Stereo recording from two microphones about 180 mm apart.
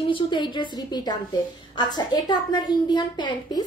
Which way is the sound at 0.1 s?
25° left (ahead or behind).